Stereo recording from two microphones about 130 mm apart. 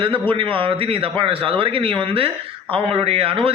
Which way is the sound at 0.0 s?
40° right (ahead or behind).